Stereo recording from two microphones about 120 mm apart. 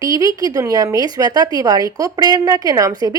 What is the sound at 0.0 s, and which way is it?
A woman's voice, 30° right (ahead or behind).